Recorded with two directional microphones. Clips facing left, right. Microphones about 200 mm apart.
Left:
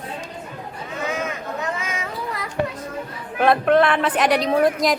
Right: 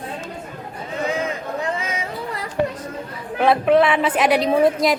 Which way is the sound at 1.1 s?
30° right (ahead or behind).